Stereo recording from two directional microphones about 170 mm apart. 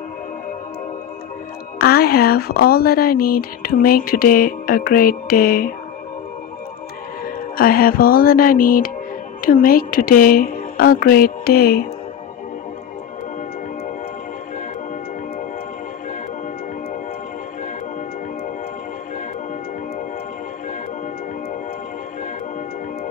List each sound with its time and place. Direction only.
1.8 s speech: 65° left (ahead or behind)
7.5 s speech: 60° left (ahead or behind)